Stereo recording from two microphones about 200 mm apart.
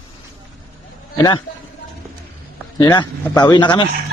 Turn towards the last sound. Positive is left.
turn(degrees=20)  # may be behind; listen again after turning